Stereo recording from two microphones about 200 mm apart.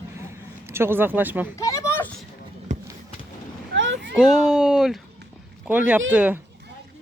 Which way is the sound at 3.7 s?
65° right (ahead or behind).